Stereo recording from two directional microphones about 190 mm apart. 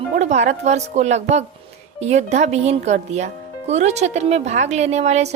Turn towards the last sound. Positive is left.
turn(degrees=-35)  # may be behind; listen again after turning